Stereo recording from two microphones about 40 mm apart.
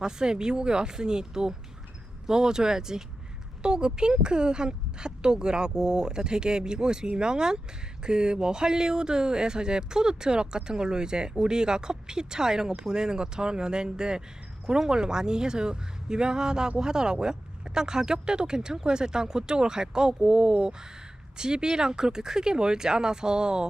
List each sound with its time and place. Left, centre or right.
0.0 s speech: centre